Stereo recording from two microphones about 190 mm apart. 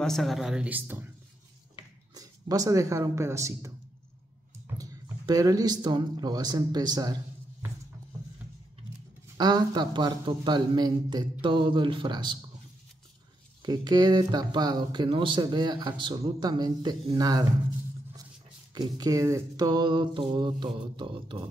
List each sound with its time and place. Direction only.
0.0 s speech: centre (ahead or behind)
2.1 s speech: 20° right (ahead or behind)
4.7 s speech: 20° right (ahead or behind)
9.4 s speech: 20° right (ahead or behind)
13.6 s speech: 20° right (ahead or behind)
18.8 s speech: 20° right (ahead or behind)